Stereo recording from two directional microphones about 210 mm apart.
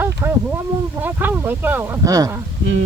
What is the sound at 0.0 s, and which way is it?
Speech, 10° right (ahead or behind).